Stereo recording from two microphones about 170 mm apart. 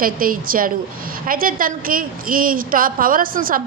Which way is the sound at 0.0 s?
55° right (ahead or behind).